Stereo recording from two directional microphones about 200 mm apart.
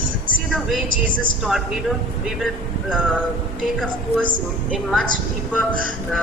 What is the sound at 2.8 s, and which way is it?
Speech, centre (ahead or behind).